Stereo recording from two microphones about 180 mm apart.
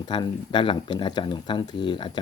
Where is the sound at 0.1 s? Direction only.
25° left (ahead or behind).